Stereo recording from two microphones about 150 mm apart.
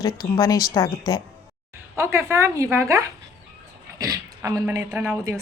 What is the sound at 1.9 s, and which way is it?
A woman's voice, 20° right (ahead or behind).